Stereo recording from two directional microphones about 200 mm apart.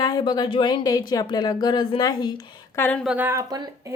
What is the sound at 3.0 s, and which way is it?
Speech, 5° right (ahead or behind).